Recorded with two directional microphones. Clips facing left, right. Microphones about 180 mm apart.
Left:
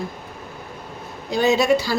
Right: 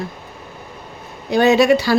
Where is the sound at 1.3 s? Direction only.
65° right (ahead or behind).